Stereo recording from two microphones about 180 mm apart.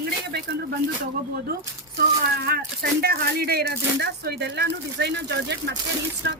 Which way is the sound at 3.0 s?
60° right (ahead or behind).